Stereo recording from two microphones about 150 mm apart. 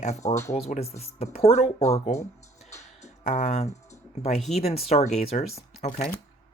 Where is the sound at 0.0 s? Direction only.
50° left (ahead or behind).